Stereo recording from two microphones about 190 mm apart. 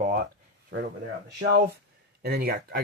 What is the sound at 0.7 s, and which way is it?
Speech, 70° right (ahead or behind).